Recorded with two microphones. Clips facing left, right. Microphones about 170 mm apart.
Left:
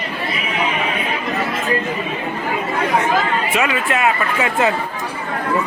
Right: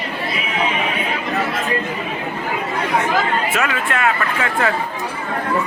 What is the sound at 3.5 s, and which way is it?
Speech, 5° left (ahead or behind).